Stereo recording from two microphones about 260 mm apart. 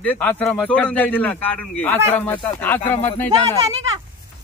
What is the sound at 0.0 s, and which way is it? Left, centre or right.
A man's voice, centre.